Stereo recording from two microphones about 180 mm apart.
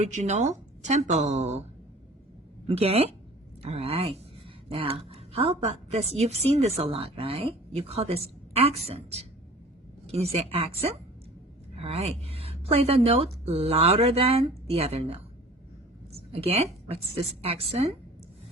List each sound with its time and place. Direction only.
0.0 s a woman's voice: 40° right (ahead or behind)
2.6 s a woman's voice: 35° right (ahead or behind)
16.3 s a woman's voice: 35° right (ahead or behind)